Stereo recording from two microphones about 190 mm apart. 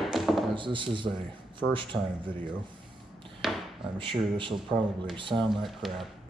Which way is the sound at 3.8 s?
25° right (ahead or behind).